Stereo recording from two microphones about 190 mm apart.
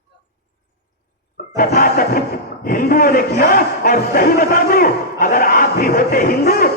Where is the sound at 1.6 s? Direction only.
50° left (ahead or behind).